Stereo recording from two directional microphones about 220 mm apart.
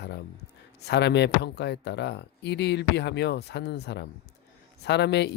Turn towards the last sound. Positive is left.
turn(degrees=50)  # may be behind; listen again after turning